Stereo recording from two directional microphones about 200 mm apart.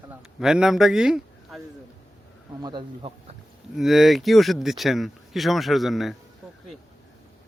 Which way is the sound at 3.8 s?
Centre (ahead or behind).